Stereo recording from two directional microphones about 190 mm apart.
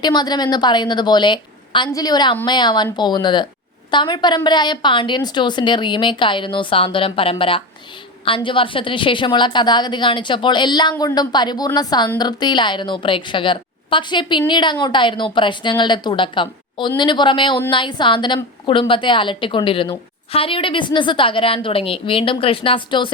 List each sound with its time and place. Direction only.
0.0 s a woman's voice: 20° left (ahead or behind)